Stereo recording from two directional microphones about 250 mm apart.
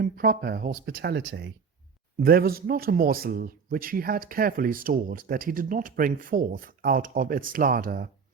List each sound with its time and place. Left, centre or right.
0.0 s speech: right